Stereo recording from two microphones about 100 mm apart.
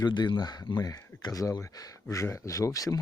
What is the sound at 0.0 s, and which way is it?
Speech, 50° left (ahead or behind).